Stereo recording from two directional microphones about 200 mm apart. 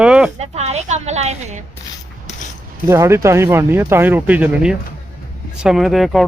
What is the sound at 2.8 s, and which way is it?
Speech, 15° right (ahead or behind).